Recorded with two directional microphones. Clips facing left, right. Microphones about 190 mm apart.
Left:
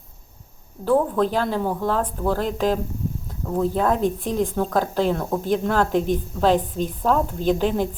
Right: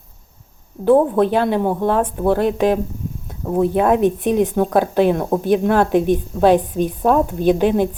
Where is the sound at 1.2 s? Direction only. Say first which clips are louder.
Right 5 dB; 20° right (ahead or behind).